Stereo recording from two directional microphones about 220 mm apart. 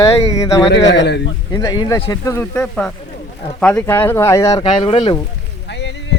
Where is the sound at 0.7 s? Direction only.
55° left (ahead or behind).